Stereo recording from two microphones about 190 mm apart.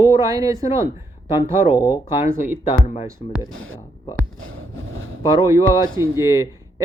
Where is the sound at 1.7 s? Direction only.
20° left (ahead or behind).